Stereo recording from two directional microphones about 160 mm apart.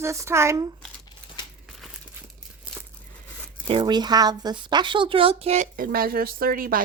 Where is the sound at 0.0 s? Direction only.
15° right (ahead or behind).